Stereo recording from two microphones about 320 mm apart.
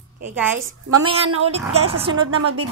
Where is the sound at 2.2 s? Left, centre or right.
Right.